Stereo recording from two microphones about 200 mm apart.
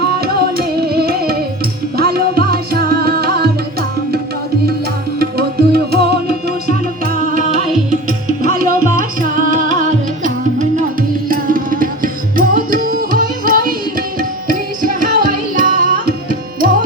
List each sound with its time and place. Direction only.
0.2 s music: 50° right (ahead or behind)
5.2 s music: 50° right (ahead or behind)
8.5 s music: 45° right (ahead or behind)
11.3 s tabla: 45° right (ahead or behind)
14.2 s carnatic music: 45° right (ahead or behind)